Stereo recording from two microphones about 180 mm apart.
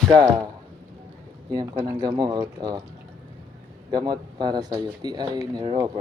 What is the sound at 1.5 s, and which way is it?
Speech, 25° right (ahead or behind).